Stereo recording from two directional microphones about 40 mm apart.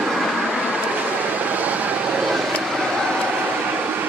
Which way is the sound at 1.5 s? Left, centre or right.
Right.